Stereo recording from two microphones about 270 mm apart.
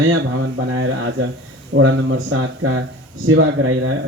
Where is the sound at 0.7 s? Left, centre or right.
Right.